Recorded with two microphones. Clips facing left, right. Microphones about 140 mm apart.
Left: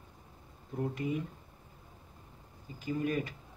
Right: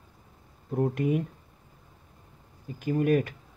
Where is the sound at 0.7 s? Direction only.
60° right (ahead or behind).